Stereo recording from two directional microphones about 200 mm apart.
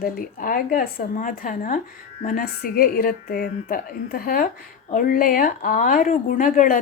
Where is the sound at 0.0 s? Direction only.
45° left (ahead or behind).